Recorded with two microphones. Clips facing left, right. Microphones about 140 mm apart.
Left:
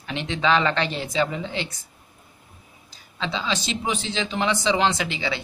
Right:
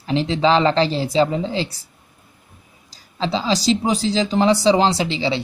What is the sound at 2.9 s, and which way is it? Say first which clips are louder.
A man's voice: right 7 dB; 35° right (ahead or behind).